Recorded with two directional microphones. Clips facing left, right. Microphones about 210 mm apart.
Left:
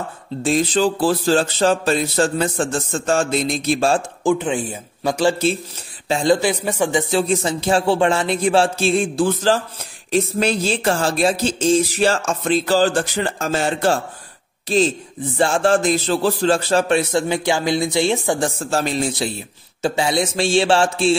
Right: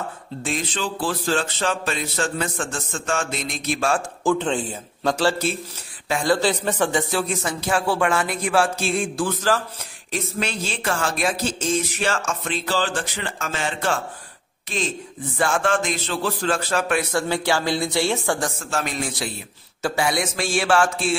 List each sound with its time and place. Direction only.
0.4 s speech: 35° left (ahead or behind)
4.2 s speech: 10° left (ahead or behind)
6.0 s a man's voice: 25° left (ahead or behind)
18.6 s a man's voice: 35° left (ahead or behind)